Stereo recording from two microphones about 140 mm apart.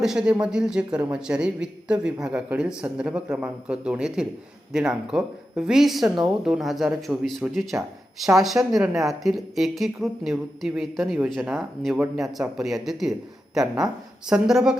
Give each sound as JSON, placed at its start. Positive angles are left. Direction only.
{"t": 0.0, "sound": "speech", "side_deg": -5}